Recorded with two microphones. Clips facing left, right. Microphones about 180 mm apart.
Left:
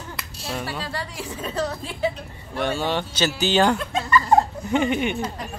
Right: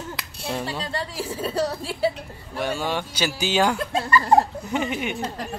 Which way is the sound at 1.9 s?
35° right (ahead or behind).